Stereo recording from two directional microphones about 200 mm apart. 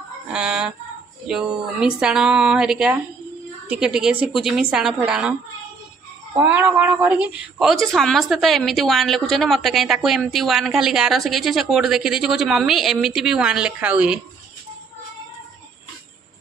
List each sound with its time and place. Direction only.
0.3 s a woman's voice: 5° right (ahead or behind)
6.3 s a woman's voice: 10° right (ahead or behind)